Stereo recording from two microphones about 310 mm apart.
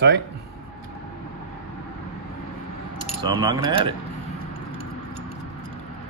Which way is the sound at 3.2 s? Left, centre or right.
Centre.